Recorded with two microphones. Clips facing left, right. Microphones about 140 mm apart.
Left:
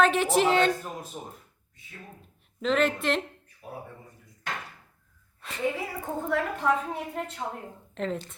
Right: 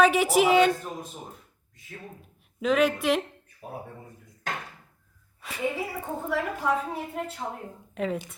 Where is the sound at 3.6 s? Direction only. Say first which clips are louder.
Right 2 dB; 40° right (ahead or behind).